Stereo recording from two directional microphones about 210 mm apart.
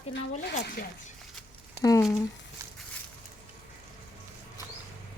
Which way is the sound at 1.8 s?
15° left (ahead or behind).